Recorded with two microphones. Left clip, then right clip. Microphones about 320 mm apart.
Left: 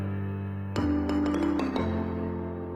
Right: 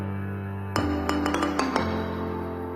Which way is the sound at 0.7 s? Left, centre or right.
Centre.